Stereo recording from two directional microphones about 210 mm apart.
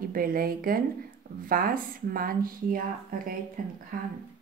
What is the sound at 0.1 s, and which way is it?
Speech, 45° right (ahead or behind).